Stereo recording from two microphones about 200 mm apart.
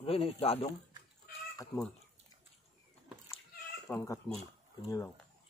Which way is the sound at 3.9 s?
15° left (ahead or behind).